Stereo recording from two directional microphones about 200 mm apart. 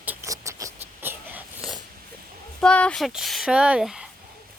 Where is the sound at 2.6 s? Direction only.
5° left (ahead or behind).